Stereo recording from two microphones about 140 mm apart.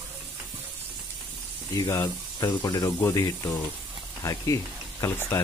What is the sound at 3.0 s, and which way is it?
Speech, 15° left (ahead or behind).